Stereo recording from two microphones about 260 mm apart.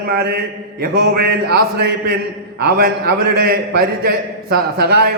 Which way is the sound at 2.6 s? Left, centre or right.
Right.